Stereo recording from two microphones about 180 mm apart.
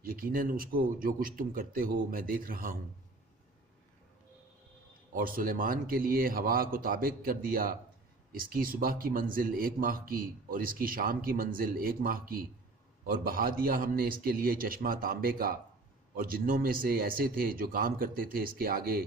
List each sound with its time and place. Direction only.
0.0 s speech: 55° right (ahead or behind)
5.1 s speech: 50° right (ahead or behind)